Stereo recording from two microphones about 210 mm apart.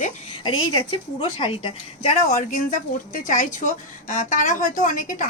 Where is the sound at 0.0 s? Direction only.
30° left (ahead or behind).